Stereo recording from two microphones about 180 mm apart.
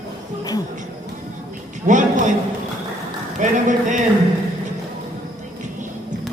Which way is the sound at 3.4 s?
45° right (ahead or behind).